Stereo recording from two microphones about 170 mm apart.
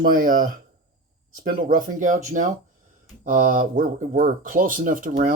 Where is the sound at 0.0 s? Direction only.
55° right (ahead or behind).